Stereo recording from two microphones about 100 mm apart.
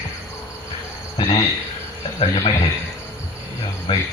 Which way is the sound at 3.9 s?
55° left (ahead or behind).